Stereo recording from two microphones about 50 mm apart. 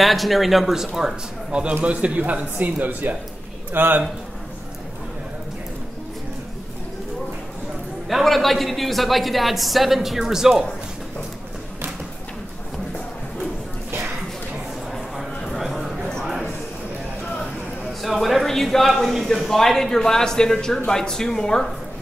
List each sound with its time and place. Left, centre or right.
0.0 s speech: centre
0.9 s a man's voice: centre; by 4.0 s right
8.1 s speech: centre
14.9 s a sound: centre
18.0 s speech: centre